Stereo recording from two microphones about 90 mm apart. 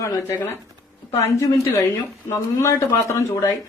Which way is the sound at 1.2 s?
35° left (ahead or behind).